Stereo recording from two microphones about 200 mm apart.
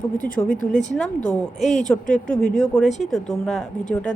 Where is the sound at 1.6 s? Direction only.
35° left (ahead or behind).